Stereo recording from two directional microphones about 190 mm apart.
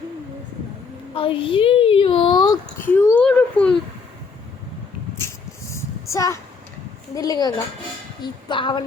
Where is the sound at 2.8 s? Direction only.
10° left (ahead or behind).